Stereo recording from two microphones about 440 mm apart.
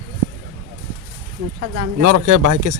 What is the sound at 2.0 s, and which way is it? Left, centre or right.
Speech, right.